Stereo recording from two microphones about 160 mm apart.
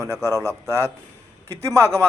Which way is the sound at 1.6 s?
20° right (ahead or behind).